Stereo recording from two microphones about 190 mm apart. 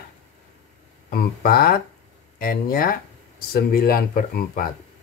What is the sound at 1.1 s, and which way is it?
Speech, 50° left (ahead or behind).